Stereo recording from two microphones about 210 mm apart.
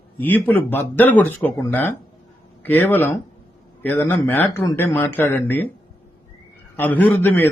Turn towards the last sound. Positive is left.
turn(degrees=10)  # may be behind; listen again after turning